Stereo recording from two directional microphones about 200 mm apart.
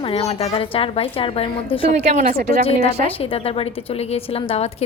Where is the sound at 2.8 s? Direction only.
30° left (ahead or behind).